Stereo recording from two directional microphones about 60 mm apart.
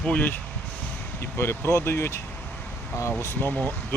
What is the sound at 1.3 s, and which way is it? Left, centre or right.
Speech, left.